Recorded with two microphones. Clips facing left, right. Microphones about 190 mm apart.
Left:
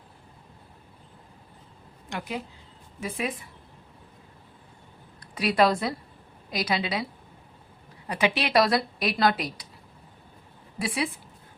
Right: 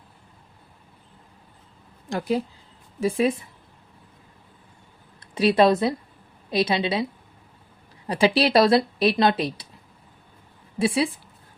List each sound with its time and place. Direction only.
2.0 s speech: 35° right (ahead or behind)
5.2 s speech: 25° right (ahead or behind)
10.8 s speech: 25° right (ahead or behind)